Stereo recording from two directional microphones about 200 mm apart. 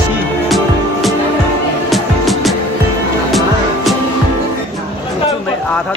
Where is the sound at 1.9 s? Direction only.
Centre (ahead or behind).